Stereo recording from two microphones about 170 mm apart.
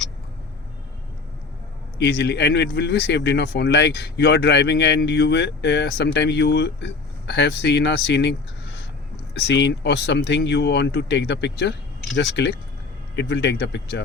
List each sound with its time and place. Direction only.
2.0 s speech: 80° left
13.1 s speech: 90° left